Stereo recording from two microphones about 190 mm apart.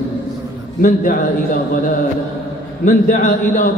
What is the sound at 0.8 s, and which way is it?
Speech, 45° left (ahead or behind).